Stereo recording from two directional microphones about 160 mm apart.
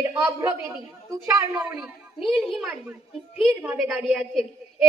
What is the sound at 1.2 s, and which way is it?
Speech, 15° right (ahead or behind).